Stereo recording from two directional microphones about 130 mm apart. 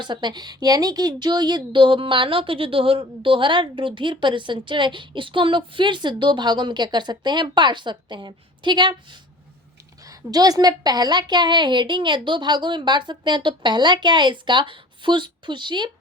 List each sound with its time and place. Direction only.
0.0 s a woman's voice: 35° right (ahead or behind)
10.1 s a woman's voice: 30° right (ahead or behind)